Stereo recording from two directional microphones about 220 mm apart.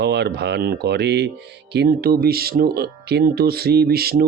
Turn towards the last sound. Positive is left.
turn(degrees=-45)  # may be behind; listen again after turning